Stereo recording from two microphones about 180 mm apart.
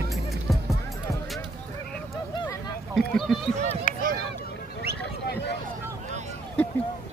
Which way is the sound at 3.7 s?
45° left (ahead or behind).